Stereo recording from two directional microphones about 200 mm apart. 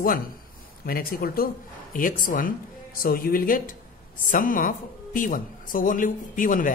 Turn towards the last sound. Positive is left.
turn(degrees=40)  # may be behind; listen again after turning